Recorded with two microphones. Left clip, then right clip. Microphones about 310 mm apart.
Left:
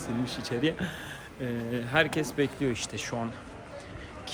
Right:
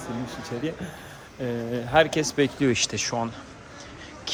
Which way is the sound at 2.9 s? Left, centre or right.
Centre.